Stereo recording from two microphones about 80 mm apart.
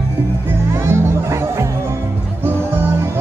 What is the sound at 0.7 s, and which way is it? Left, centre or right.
Music, right.